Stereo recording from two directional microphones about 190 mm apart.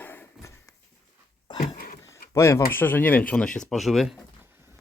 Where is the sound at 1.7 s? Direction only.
45° left (ahead or behind).